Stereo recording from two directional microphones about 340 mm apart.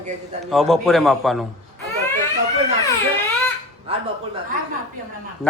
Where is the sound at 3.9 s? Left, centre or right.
Centre.